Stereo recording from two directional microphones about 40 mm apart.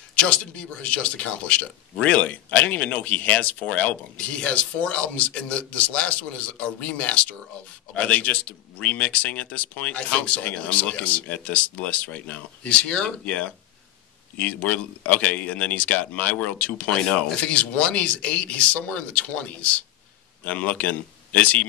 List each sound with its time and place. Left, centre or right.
0.1 s speech: left